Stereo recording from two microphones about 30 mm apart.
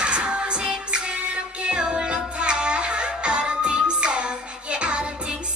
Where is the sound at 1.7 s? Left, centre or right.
Right.